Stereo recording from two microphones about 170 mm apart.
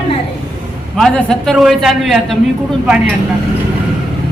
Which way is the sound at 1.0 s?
Centre (ahead or behind).